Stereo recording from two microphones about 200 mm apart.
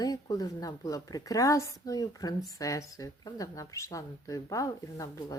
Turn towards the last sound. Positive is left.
turn(degrees=15)  # may be behind; listen again after turning